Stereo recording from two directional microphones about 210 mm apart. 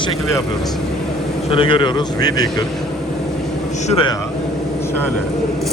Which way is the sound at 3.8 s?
25° left (ahead or behind).